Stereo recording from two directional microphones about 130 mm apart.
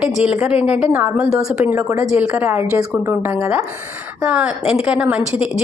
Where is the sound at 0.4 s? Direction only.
10° right (ahead or behind).